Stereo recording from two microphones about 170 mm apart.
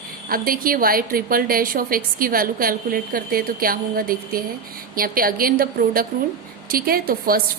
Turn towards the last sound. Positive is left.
turn(degrees=-60)  # may be behind; listen again after turning